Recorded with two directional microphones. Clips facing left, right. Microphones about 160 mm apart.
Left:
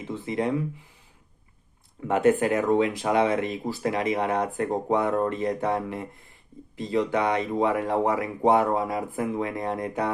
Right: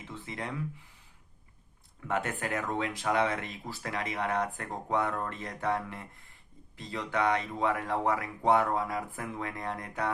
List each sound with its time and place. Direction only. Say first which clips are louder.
0.1 s speech: left 12 dB; 20° left (ahead or behind)
2.0 s speech: left 12 dB; 20° left (ahead or behind)